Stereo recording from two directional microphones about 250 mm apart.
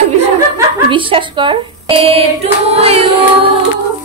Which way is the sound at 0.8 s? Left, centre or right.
Centre.